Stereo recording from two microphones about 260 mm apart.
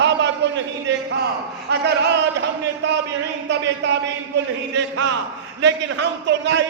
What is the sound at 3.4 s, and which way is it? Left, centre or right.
Speech, right.